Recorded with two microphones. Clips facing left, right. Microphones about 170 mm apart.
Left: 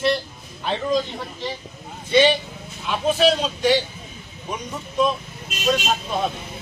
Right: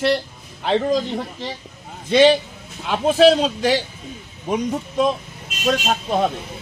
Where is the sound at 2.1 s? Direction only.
90° right.